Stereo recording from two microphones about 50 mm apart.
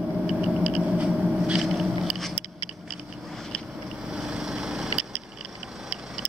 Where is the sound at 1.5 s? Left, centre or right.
Centre.